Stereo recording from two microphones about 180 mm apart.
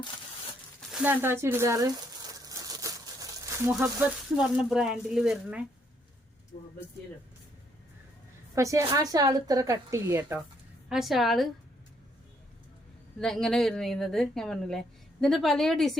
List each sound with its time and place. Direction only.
0.8 s a sound: 5° right (ahead or behind)
4.4 s a woman's voice: 5° right (ahead or behind)
8.5 s a woman's voice: 15° right (ahead or behind)
10.8 s a woman's voice: centre (ahead or behind)
13.1 s a woman's voice: 5° left (ahead or behind)